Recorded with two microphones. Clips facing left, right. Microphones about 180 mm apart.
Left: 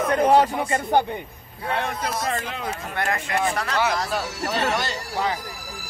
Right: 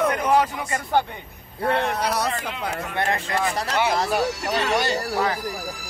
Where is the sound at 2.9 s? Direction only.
30° right (ahead or behind).